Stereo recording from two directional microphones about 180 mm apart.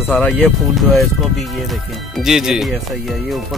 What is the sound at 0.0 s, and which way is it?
Speech, 10° left (ahead or behind).